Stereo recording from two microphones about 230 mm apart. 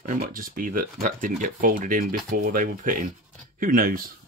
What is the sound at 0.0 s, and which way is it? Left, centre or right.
Speech, right.